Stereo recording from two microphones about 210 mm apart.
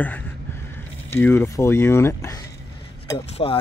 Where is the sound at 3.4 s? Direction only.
25° left (ahead or behind).